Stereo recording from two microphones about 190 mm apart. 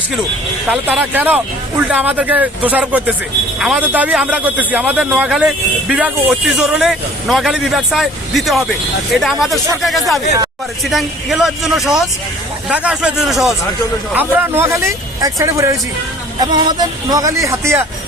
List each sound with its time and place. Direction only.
0.7 s speech: 10° right (ahead or behind)